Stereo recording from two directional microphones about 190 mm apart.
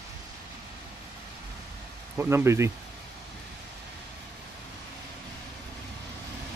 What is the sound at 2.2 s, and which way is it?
Speech, 10° right (ahead or behind).